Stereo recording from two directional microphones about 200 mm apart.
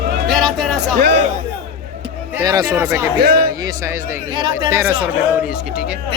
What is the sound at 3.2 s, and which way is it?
Speech, 50° right (ahead or behind).